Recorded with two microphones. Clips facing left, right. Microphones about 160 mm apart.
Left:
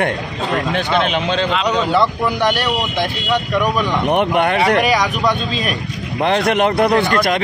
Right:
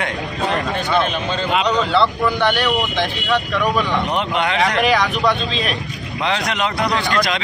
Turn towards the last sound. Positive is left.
turn(degrees=55)  # may be behind; listen again after turning